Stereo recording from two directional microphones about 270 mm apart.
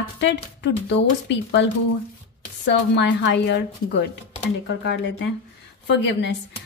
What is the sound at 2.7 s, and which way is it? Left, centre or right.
A woman's voice, left.